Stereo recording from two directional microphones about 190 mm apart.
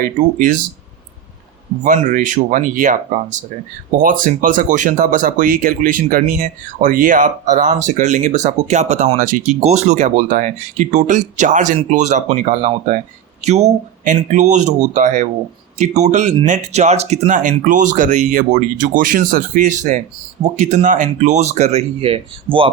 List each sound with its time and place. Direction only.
0.0 s speech: 45° right (ahead or behind)
1.8 s speech: 45° right (ahead or behind); by 22.7 s 30° right (ahead or behind)